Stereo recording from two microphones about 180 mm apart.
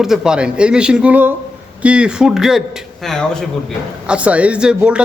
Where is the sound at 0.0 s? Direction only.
5° right (ahead or behind).